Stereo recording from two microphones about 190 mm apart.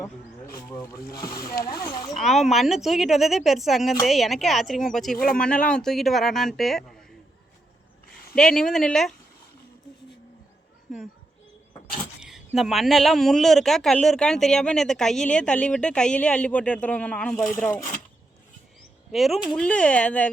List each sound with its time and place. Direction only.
0.5 s speech: 15° left (ahead or behind)
1.8 s a sound: 20° left (ahead or behind)
2.1 s speech: centre (ahead or behind)
5.1 s speech: 50° left (ahead or behind)
5.4 s speech: 5° left (ahead or behind)
8.4 s speech: centre (ahead or behind)
12.5 s speech: centre (ahead or behind)
17.7 s speech: 45° left (ahead or behind)
19.1 s speech: centre (ahead or behind)